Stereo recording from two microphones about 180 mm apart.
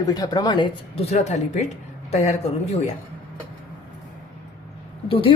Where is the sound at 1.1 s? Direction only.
40° left (ahead or behind).